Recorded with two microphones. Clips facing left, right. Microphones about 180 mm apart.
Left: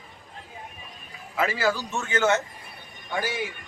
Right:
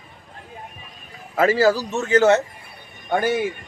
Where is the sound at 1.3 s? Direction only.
40° right (ahead or behind).